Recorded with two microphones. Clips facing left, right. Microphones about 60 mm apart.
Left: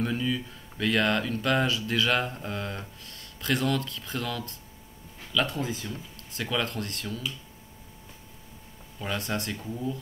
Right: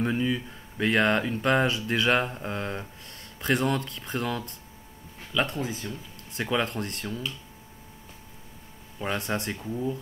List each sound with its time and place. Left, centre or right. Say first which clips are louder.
0.0 s speech: right 2 dB; right
5.6 s speech: even; centre
5.9 s speech: right 1 dB; right
9.0 s speech: right 3 dB; right
9.6 s speech: right 3 dB; centre